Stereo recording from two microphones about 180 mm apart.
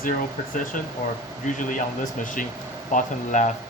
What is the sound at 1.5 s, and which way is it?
Speech, 45° left (ahead or behind).